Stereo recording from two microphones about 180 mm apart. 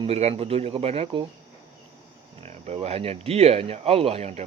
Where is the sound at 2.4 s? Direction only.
35° right (ahead or behind).